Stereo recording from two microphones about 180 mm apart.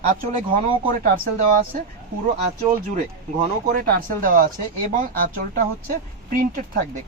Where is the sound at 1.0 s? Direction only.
50° right (ahead or behind).